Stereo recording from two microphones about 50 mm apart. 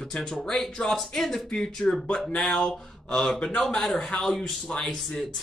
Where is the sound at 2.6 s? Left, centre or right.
Centre.